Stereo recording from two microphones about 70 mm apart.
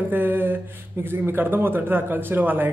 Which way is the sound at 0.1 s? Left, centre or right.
Right.